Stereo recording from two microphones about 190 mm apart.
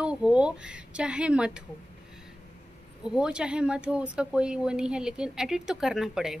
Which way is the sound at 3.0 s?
5° right (ahead or behind).